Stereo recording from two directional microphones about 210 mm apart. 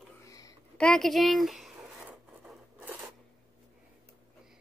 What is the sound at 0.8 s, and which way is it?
Zipper, centre (ahead or behind).